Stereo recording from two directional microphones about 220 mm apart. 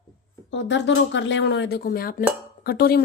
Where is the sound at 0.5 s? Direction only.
55° left (ahead or behind).